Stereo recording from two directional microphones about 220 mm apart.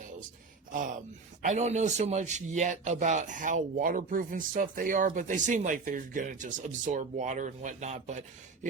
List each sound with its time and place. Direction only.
1.4 s a man's voice: 35° right (ahead or behind)